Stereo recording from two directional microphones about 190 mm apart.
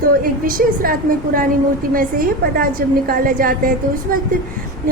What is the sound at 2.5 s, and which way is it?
A woman's voice, 50° right (ahead or behind).